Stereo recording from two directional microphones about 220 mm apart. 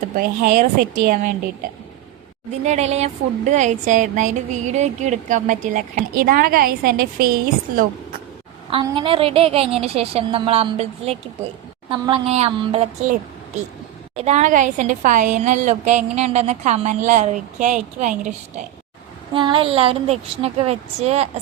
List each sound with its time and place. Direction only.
0.2 s a woman's voice: 40° right (ahead or behind)
2.6 s a woman's voice: 30° right (ahead or behind)
8.7 s a woman's voice: 25° right (ahead or behind)
14.2 s a woman's voice: 30° right (ahead or behind)
19.3 s a woman's voice: 20° right (ahead or behind)